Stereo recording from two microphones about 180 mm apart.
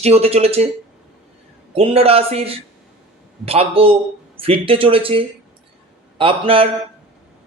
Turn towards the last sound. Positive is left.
turn(degrees=-30)  # may be behind; listen again after turning